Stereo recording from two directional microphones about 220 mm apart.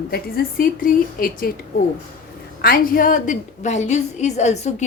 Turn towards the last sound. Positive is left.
turn(degrees=30)  # may be behind; listen again after turning